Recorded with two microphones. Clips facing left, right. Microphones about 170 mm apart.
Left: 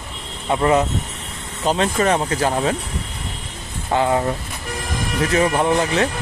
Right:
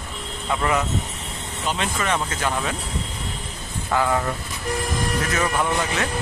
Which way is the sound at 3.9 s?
25° left (ahead or behind).